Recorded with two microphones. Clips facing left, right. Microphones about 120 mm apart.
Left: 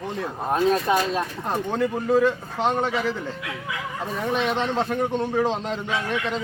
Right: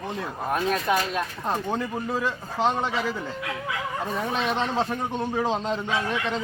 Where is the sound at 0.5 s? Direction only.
30° left (ahead or behind).